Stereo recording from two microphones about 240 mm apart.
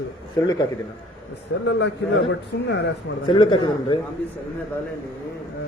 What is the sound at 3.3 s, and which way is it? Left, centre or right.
Speech, centre.